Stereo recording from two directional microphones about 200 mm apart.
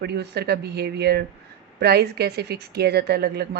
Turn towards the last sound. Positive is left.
turn(degrees=-55)  # may be behind; listen again after turning